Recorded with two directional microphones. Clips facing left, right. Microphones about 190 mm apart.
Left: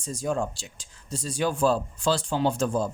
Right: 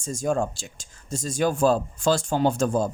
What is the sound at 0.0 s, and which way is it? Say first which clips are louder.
Speech: right 3 dB; 45° right (ahead or behind).